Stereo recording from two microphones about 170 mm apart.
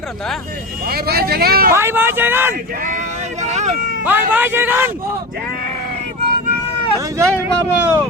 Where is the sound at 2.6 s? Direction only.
55° right (ahead or behind).